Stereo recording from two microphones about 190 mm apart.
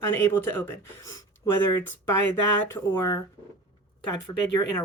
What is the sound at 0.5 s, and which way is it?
Speech, 15° left (ahead or behind).